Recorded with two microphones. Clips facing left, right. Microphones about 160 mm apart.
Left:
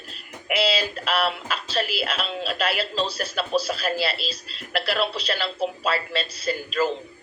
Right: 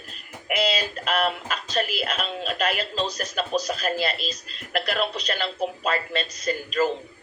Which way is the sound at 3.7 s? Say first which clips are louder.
Even; 45° right (ahead or behind).